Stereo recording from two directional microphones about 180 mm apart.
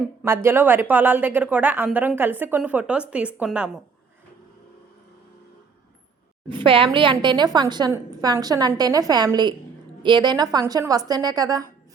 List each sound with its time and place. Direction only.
0.2 s a woman's voice: 10° right (ahead or behind)
6.5 s a woman's voice: 30° right (ahead or behind)